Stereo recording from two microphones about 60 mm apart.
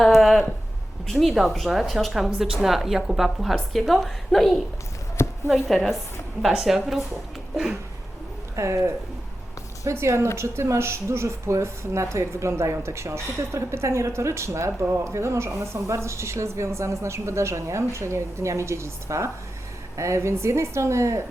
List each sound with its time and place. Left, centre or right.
0.1 s a sound: centre
1.0 s a woman's voice: centre
5.2 s chopping: left
5.6 s a woman's voice: centre
7.5 s a sound: centre
8.5 s speech: right